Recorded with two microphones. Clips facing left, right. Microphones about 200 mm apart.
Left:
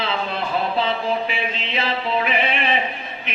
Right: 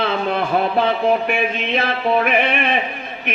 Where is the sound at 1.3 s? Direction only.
55° right (ahead or behind).